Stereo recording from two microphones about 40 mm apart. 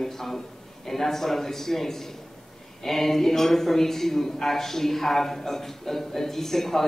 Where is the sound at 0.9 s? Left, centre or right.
Centre.